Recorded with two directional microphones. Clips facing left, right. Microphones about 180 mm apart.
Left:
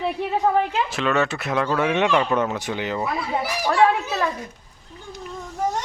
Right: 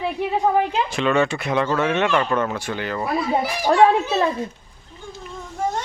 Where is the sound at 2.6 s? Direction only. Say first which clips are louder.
Even; 15° left (ahead or behind).